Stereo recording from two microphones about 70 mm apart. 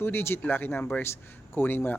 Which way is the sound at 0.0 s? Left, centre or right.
Left.